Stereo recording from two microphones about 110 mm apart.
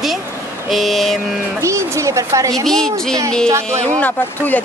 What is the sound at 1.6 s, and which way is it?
A woman's voice, 25° right (ahead or behind).